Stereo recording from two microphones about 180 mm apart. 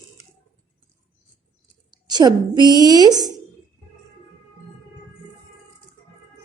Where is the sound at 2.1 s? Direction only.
25° right (ahead or behind).